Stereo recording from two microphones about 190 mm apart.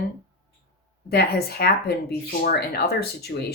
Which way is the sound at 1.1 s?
55° left (ahead or behind).